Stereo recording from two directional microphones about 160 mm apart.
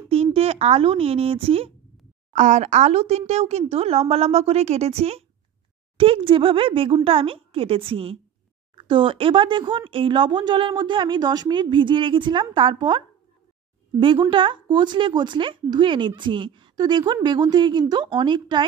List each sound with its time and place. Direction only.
0.1 s speech: 35° right (ahead or behind)
2.3 s speech: 50° right (ahead or behind); by 18.7 s 30° right (ahead or behind)